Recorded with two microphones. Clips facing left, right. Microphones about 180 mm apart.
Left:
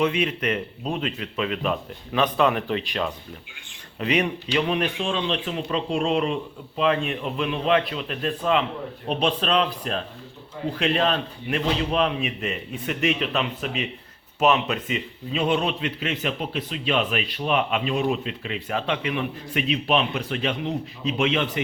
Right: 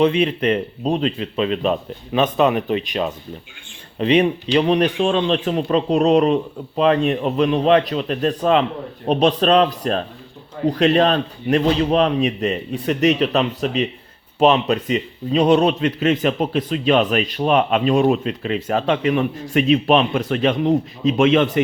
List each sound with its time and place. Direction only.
0.0 s speech: 30° right (ahead or behind); by 21.6 s 45° right (ahead or behind)